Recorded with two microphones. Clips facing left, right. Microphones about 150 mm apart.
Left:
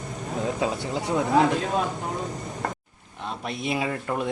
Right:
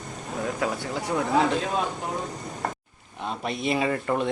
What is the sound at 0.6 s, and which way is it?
Speech, 20° left (ahead or behind).